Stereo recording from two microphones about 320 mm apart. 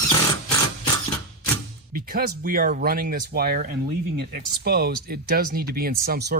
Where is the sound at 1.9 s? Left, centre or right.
Right.